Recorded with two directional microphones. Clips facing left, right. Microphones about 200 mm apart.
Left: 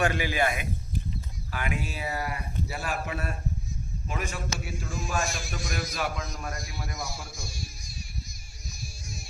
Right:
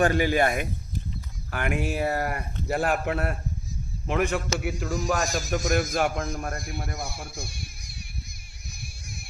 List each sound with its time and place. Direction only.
0.0 s a man's voice: 40° right (ahead or behind); by 4.7 s 60° right (ahead or behind)
4.9 s a man's voice: 40° right (ahead or behind); by 8.0 s 60° right (ahead or behind)
8.7 s music: 60° right (ahead or behind)